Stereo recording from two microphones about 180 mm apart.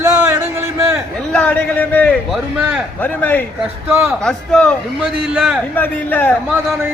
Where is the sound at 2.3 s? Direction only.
5° right (ahead or behind).